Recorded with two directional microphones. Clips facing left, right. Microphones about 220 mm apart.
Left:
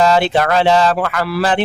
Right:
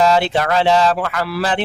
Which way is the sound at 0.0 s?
60° left (ahead or behind).